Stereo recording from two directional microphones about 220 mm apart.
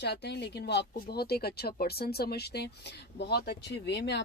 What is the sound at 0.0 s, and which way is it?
Speech, 50° left (ahead or behind).